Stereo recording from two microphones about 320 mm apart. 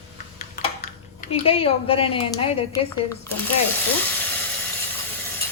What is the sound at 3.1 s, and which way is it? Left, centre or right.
Speech, centre.